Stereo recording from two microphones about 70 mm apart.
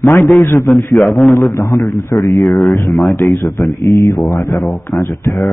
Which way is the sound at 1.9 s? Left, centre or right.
Left.